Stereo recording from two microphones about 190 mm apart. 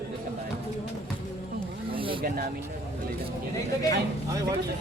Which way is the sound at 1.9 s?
25° right (ahead or behind).